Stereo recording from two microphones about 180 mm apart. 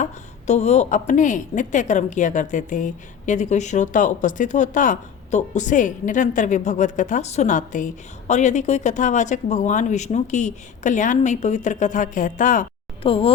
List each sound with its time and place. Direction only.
0.0 s a woman's voice: 40° left (ahead or behind)
13.0 s speech: 30° left (ahead or behind)